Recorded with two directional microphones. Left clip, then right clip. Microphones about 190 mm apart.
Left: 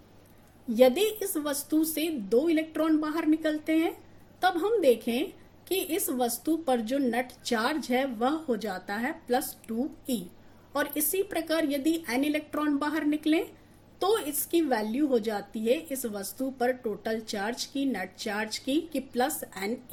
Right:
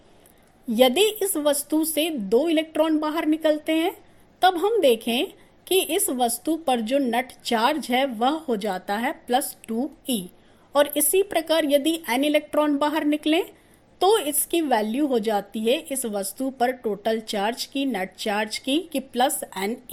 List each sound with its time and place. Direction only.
0.7 s a woman's voice: 35° right (ahead or behind)